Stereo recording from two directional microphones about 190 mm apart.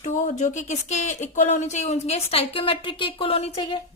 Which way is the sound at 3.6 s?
25° left (ahead or behind).